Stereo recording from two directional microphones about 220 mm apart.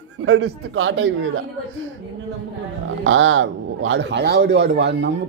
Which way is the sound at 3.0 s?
60° right (ahead or behind).